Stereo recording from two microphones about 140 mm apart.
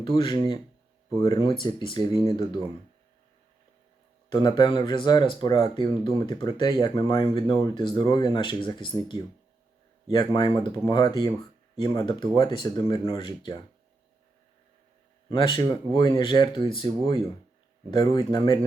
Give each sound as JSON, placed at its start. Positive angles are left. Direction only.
{"t": 0.0, "sound": "speech", "side_deg": 35}
{"t": 4.3, "sound": "speech", "side_deg": 30}
{"t": 15.3, "sound": "speech", "side_deg": 35}